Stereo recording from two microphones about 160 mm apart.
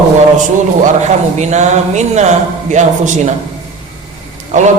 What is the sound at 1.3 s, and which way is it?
A man's voice, 45° right (ahead or behind).